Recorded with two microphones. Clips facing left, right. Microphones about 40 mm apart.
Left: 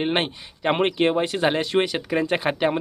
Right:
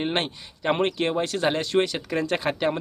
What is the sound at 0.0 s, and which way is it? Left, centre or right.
Speech, centre.